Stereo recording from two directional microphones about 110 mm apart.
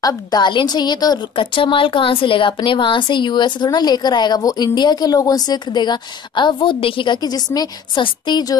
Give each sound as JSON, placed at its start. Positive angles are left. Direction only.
{"t": 0.0, "sound": "a woman's voice", "side_deg": 40}